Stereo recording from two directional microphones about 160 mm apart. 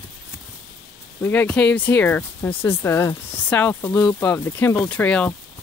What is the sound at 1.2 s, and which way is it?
Speech, 10° left (ahead or behind).